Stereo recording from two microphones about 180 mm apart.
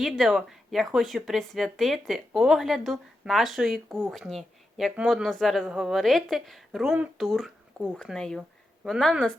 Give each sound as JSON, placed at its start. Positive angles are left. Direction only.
{"t": 0.0, "sound": "speech", "side_deg": 0}